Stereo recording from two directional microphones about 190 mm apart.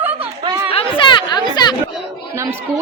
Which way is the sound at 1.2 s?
20° left (ahead or behind).